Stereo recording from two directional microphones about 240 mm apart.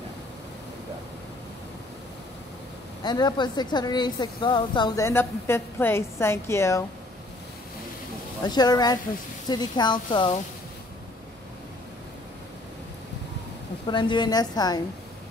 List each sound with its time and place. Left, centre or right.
3.0 s a woman's voice: centre
8.5 s a woman's voice: centre
13.8 s a woman's voice: centre